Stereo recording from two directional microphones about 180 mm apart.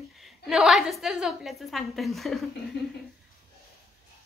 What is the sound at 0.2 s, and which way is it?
A child's voice, centre (ahead or behind).